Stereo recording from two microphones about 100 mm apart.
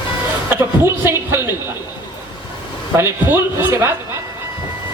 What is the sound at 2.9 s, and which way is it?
A man's voice, 25° right (ahead or behind).